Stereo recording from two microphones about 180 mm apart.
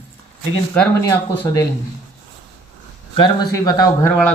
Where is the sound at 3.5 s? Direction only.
20° left (ahead or behind).